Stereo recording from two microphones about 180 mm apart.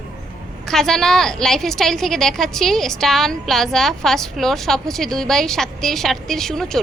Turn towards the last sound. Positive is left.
turn(degrees=0)  # may be behind; listen again after turning